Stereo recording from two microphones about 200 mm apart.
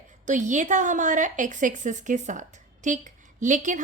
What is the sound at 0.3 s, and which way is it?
A woman's voice, 40° right (ahead or behind).